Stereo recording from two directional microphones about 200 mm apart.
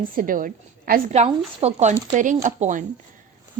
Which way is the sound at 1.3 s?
35° right (ahead or behind).